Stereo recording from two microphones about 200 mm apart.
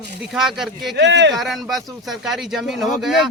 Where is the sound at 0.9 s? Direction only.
60° right (ahead or behind).